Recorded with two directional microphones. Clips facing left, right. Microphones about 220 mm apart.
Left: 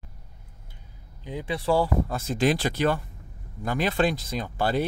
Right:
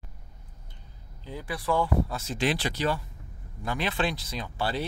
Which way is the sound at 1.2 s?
20° left (ahead or behind).